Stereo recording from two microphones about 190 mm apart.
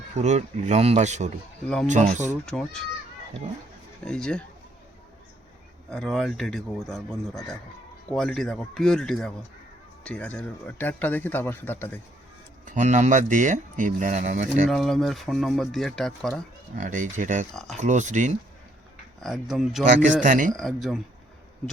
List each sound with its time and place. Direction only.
0.2 s speech: 35° right (ahead or behind)
1.6 s speech: 5° left (ahead or behind)
1.9 s speech: 40° right (ahead or behind)
2.5 s speech: 5° left (ahead or behind)
4.0 s speech: 5° left (ahead or behind)
5.9 s speech: centre (ahead or behind)
12.6 s speech: 40° right (ahead or behind)
14.7 s speech: centre (ahead or behind)
16.7 s speech: 40° right (ahead or behind)
17.5 s speech: centre (ahead or behind)
17.7 s speech: 40° right (ahead or behind)
19.2 s speech: centre (ahead or behind)
20.2 s speech: 45° right (ahead or behind)
20.6 s speech: centre (ahead or behind)